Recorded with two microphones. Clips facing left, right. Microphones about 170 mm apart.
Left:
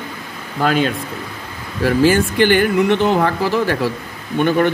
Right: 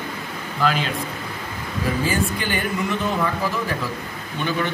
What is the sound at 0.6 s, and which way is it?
Speech, 50° left (ahead or behind).